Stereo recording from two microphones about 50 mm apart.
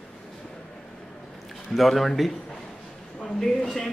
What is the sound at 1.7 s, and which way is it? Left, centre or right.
A man's voice, centre.